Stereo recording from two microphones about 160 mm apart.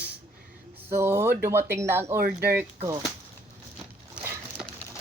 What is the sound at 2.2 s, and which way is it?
Speech, 70° right (ahead or behind).